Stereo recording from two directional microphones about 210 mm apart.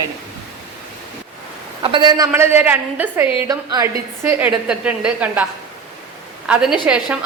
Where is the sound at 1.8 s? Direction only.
20° right (ahead or behind).